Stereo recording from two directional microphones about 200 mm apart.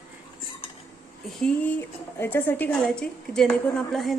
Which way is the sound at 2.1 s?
10° left (ahead or behind).